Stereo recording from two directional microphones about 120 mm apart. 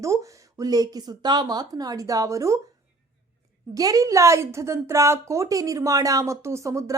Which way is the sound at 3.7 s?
30° right (ahead or behind).